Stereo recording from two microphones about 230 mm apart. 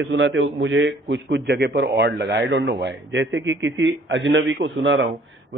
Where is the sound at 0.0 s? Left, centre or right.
Right.